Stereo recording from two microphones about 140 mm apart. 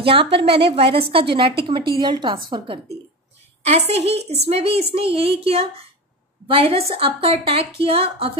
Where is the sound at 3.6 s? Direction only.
50° right (ahead or behind).